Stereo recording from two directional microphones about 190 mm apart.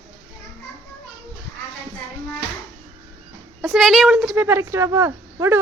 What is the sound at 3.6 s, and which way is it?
A woman's voice, centre (ahead or behind).